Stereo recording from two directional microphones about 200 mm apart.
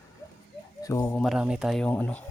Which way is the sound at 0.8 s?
15° left (ahead or behind).